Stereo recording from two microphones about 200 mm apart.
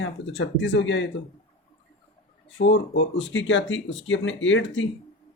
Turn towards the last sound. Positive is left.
turn(degrees=70)  # may be behind; listen again after turning